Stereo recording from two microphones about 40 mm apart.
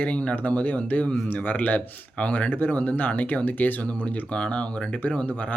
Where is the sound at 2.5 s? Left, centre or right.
Left.